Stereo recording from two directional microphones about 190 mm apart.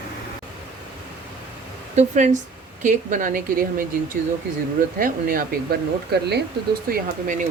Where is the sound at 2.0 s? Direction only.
40° right (ahead or behind); by 6.4 s 60° right (ahead or behind).